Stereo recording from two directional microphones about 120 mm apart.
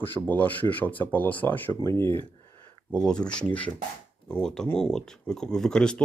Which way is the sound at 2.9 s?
5° left (ahead or behind).